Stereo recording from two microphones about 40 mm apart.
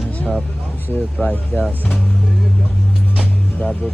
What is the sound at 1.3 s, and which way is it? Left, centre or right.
Speech, centre.